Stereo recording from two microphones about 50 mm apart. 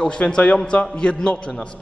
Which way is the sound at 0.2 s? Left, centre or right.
Left.